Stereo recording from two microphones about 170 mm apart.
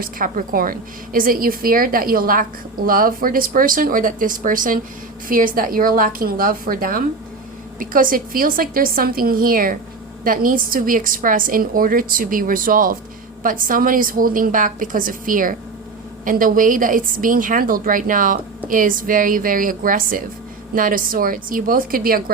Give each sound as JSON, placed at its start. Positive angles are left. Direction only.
{"t": 0.0, "sound": "a woman's voice", "side_deg": -55}